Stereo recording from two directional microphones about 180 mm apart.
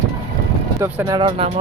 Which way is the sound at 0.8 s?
15° right (ahead or behind).